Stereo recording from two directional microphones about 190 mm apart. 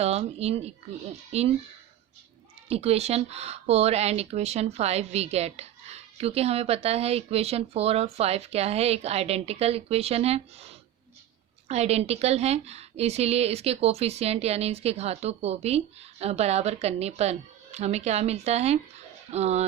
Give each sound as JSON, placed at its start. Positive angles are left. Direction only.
{"t": 0.0, "sound": "speech", "side_deg": -35}
{"t": 2.6, "sound": "speech", "side_deg": -35}